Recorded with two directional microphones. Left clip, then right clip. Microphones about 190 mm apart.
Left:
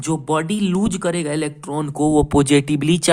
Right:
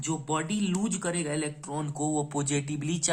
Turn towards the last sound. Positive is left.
turn(degrees=50)  # may be behind; listen again after turning